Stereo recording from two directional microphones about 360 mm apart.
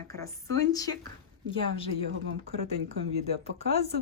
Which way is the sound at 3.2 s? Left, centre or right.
Centre.